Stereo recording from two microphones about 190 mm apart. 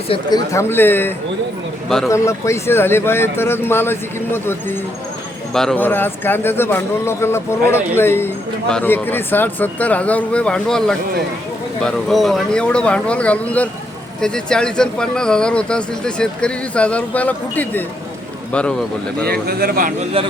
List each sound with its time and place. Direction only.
0.1 s speech: 20° left (ahead or behind)
19.2 s speech: 50° right (ahead or behind)